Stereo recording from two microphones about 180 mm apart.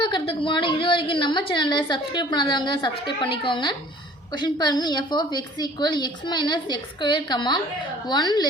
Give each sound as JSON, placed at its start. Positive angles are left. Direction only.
{"t": 0.0, "sound": "a woman's voice", "side_deg": 25}